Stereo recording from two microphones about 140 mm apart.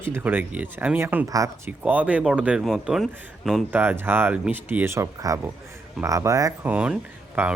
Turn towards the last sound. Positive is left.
turn(degrees=-10)  # may be behind; listen again after turning